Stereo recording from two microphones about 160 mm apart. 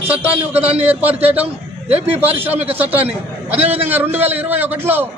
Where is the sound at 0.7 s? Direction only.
10° right (ahead or behind).